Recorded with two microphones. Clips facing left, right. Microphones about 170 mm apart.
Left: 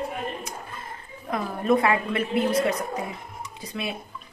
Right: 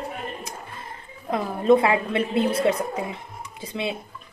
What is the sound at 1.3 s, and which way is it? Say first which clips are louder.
A woman's voice: right 4 dB; 25° right (ahead or behind).